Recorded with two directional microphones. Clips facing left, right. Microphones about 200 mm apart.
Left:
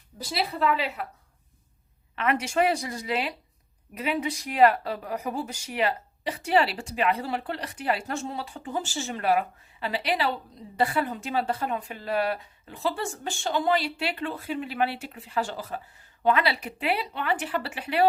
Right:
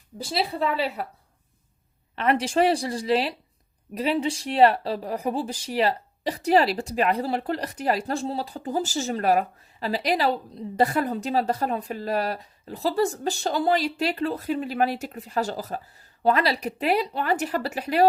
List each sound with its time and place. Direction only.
0.3 s speech: 30° right (ahead or behind)
2.1 s speech: 30° right (ahead or behind)